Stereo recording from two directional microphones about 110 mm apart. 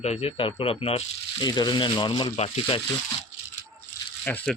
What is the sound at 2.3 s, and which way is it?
Speech, 70° left (ahead or behind).